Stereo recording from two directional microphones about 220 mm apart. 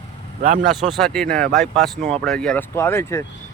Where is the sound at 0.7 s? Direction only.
Centre (ahead or behind).